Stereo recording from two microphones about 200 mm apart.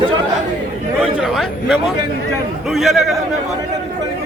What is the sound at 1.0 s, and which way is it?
Speech, centre (ahead or behind).